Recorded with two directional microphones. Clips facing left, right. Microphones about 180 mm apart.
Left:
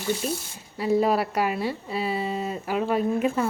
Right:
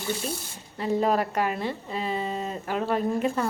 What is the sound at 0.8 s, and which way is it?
A woman's voice, 10° left (ahead or behind).